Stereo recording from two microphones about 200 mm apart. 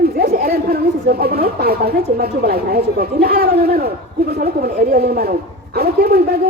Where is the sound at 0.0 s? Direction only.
50° right (ahead or behind).